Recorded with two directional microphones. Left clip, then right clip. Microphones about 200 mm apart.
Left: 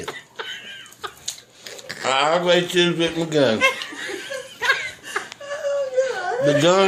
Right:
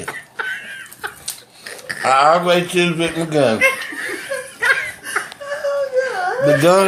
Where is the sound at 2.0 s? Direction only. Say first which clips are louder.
Right 6 dB; 10° left (ahead or behind).